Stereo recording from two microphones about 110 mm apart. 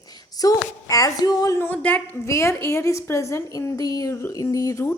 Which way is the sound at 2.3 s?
25° left (ahead or behind).